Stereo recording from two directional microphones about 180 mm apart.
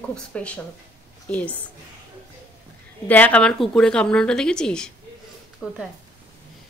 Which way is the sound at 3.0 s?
10° left (ahead or behind).